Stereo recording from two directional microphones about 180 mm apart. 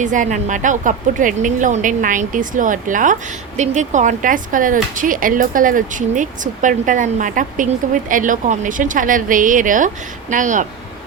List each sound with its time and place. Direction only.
0.0 s speech: 45° right (ahead or behind)